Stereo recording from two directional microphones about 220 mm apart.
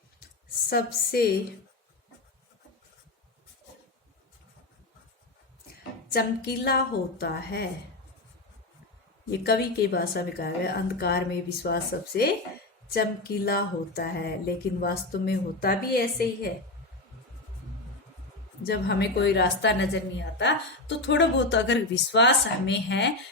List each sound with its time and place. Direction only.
0.7 s a woman's voice: 45° left (ahead or behind)
6.1 s a woman's voice: 45° left (ahead or behind)
9.4 s a woman's voice: 45° left (ahead or behind)
18.6 s a woman's voice: 45° left (ahead or behind)